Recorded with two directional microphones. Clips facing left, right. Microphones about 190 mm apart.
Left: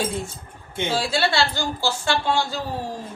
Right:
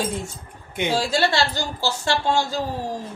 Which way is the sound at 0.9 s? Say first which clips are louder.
Right 1 dB; 40° right (ahead or behind).